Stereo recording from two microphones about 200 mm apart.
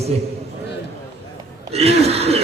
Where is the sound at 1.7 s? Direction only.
30° right (ahead or behind).